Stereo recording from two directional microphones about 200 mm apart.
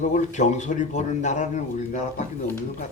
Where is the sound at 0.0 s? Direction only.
35° left (ahead or behind).